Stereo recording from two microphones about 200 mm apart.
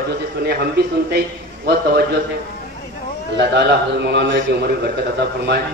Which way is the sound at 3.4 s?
55° right (ahead or behind).